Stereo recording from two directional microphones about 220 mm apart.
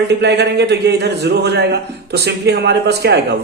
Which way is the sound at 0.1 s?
50° right (ahead or behind).